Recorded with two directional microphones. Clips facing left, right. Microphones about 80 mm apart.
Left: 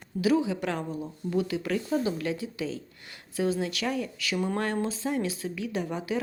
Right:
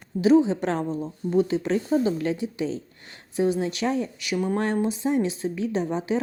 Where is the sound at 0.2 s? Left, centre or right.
Right.